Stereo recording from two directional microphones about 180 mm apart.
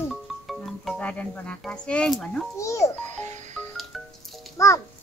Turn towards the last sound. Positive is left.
turn(degrees=15)  # may be behind; listen again after turning